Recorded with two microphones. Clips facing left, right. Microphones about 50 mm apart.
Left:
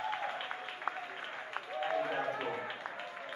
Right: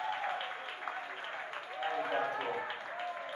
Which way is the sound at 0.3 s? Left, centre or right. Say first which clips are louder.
Right 1 dB; centre.